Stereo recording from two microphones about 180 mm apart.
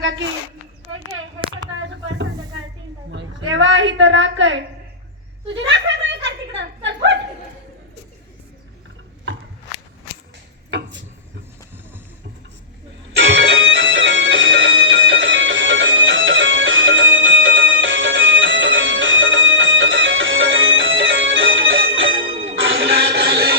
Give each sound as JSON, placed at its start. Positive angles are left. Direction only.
{"t": 1.7, "sound": "a sound", "side_deg": -90}
{"t": 5.5, "sound": "a woman's voice", "side_deg": -90}
{"t": 6.2, "sound": "a sound", "side_deg": -80}
{"t": 13.1, "sound": "music", "side_deg": -90}
{"t": 22.3, "sound": "music", "side_deg": -35}
{"t": 22.5, "sound": "music", "side_deg": -90}